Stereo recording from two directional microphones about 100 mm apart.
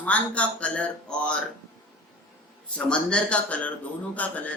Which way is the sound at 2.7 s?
10° left (ahead or behind).